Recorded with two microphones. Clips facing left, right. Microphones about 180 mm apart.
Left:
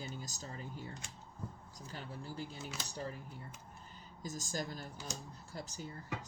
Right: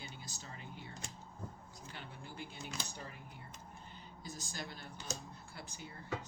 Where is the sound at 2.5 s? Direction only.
5° left (ahead or behind).